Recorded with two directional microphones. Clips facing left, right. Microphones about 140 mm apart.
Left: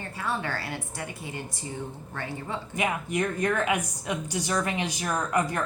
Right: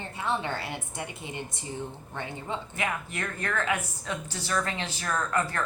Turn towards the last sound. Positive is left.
turn(degrees=15)  # may be behind; listen again after turning